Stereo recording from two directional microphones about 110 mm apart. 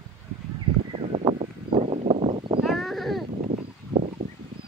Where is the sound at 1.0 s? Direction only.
60° right (ahead or behind).